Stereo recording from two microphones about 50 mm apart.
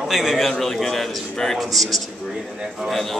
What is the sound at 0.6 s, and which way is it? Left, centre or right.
A man's voice, centre.